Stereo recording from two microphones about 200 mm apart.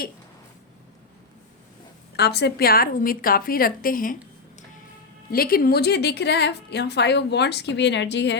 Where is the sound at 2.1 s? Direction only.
55° left (ahead or behind).